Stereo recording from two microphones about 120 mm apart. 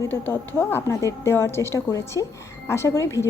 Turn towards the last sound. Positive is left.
turn(degrees=25)  # may be behind; listen again after turning